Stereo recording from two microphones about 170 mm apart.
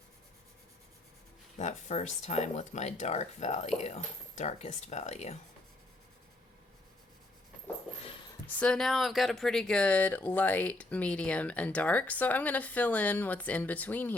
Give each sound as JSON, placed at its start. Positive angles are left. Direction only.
{"t": 1.5, "sound": "speech", "side_deg": 40}
{"t": 8.5, "sound": "speech", "side_deg": 5}